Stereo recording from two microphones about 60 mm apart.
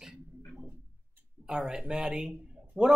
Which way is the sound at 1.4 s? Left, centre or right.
Centre.